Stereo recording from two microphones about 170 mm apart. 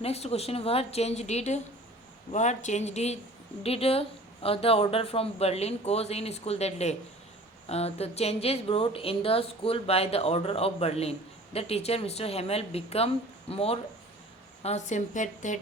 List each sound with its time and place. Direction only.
0.0 s a woman's voice: 35° left (ahead or behind)